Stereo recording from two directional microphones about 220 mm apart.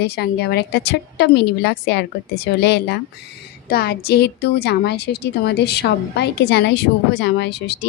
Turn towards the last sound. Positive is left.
turn(degrees=50)  # may be behind; listen again after turning